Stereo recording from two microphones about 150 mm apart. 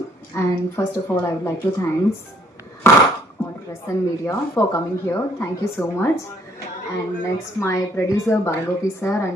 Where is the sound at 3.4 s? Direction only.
15° left (ahead or behind).